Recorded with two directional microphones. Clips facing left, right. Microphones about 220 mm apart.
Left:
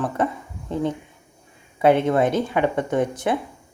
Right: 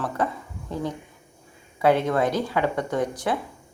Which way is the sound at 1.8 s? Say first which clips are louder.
Left 3 dB; 20° left (ahead or behind).